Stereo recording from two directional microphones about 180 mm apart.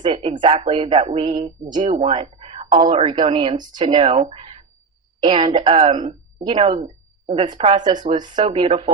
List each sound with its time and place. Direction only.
0.0 s a woman's voice: 30° right (ahead or behind)